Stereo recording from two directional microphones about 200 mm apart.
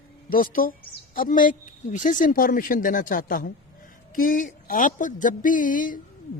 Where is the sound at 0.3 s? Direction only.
45° left (ahead or behind).